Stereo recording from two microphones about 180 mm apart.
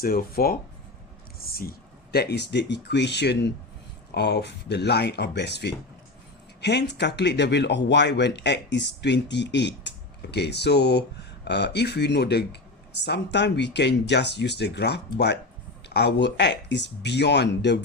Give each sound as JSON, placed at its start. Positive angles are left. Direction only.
{"t": 0.0, "sound": "speech", "side_deg": 55}
{"t": 2.1, "sound": "speech", "side_deg": 70}